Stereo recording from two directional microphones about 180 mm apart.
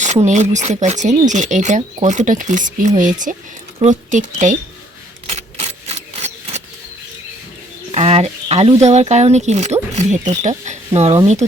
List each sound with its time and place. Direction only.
0.0 s speech: 40° right (ahead or behind)
5.2 s a sound: 35° right (ahead or behind)
7.9 s speech: 35° right (ahead or behind)